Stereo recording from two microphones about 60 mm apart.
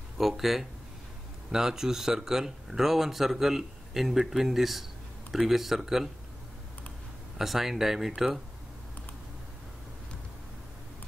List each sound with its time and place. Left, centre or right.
0.2 s speech: centre
7.3 s speech: centre